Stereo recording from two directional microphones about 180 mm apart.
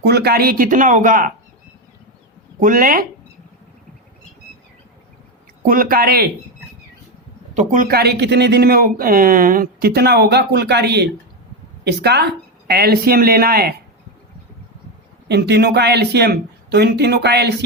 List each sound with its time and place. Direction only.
0.0 s speech: 65° right (ahead or behind); by 1.3 s 50° right (ahead or behind)
2.6 s speech: 50° right (ahead or behind)
5.6 s speech: 55° right (ahead or behind)
7.5 s speech: 45° right (ahead or behind); by 13.8 s 60° right (ahead or behind)
15.3 s speech: 65° right (ahead or behind)